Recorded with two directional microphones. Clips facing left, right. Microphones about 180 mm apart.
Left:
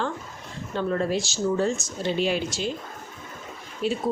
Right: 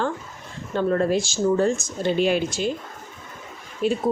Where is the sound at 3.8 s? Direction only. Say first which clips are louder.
Right 4 dB; 50° right (ahead or behind).